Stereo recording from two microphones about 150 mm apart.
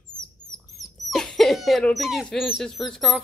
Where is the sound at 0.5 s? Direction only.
25° left (ahead or behind).